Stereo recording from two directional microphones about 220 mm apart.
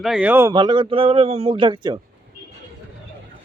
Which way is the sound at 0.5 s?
20° right (ahead or behind).